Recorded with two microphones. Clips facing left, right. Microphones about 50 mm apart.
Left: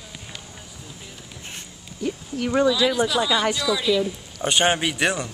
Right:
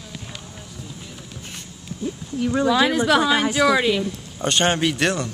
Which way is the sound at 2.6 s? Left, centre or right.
Right.